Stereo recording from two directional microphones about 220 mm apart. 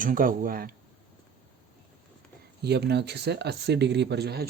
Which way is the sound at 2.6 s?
50° right (ahead or behind).